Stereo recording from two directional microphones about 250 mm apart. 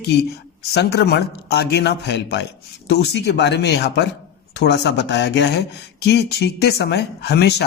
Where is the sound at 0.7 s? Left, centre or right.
Left.